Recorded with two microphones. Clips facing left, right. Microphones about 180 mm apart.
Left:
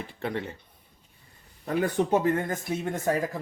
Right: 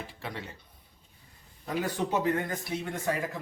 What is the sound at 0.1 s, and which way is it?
Speech, 55° left (ahead or behind).